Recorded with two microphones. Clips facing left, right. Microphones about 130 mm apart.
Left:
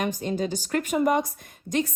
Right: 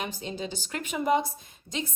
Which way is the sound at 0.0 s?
50° left (ahead or behind).